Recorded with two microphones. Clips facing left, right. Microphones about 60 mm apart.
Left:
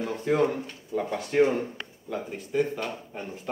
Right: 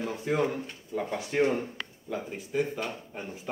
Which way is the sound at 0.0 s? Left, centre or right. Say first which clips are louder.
Left 2 dB; centre.